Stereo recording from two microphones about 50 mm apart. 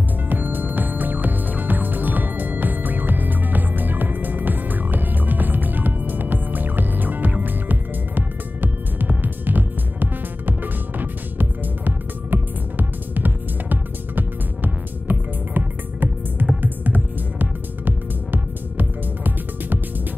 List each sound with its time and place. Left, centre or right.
0.3 s music: right